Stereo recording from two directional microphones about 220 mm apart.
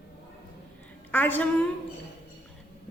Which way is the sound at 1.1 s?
10° left (ahead or behind).